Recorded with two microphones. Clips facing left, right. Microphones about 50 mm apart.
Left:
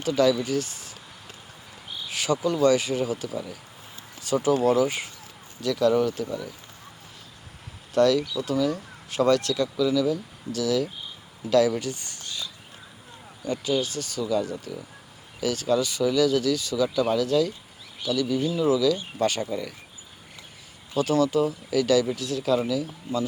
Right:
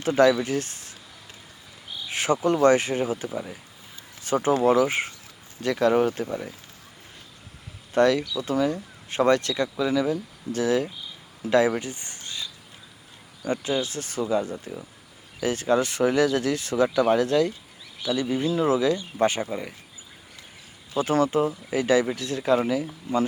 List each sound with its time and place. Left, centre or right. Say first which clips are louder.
0.0 s speech: right 3 dB; right
2.0 s speech: right 2 dB; right
7.9 s speech: even; right
19.2 s speech: right 2 dB; right
20.9 s speech: even; right